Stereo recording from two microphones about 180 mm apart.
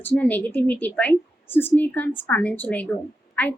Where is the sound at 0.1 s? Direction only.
10° left (ahead or behind).